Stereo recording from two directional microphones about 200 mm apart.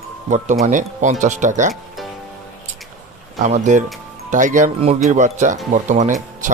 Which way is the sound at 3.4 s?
35° right (ahead or behind).